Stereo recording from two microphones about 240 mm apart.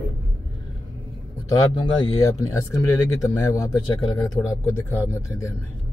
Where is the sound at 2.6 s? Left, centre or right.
Centre.